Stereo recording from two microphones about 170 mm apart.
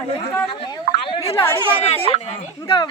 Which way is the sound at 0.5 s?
30° left (ahead or behind).